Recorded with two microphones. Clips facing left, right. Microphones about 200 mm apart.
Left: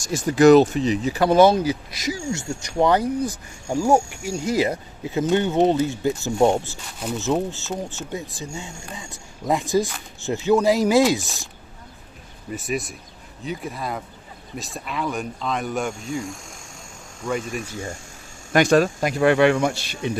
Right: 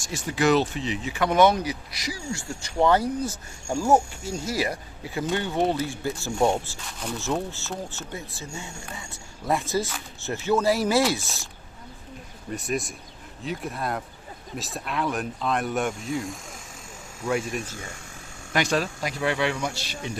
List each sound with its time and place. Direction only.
0.0 s speech: 45° left (ahead or behind); by 11.4 s 15° left (ahead or behind)
12.5 s speech: centre (ahead or behind)
18.5 s speech: 50° left (ahead or behind)